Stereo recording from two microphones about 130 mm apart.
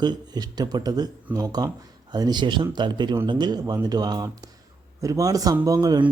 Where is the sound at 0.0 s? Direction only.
30° right (ahead or behind).